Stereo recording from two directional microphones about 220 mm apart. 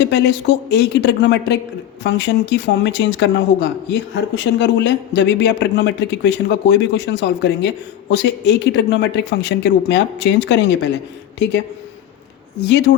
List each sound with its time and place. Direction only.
0.0 s speech: 50° left (ahead or behind)